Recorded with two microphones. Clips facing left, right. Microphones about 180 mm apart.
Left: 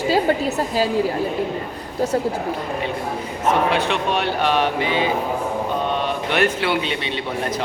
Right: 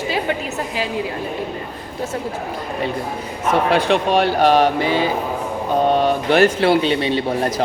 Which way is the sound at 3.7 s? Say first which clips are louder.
Right 5 dB; 35° right (ahead or behind).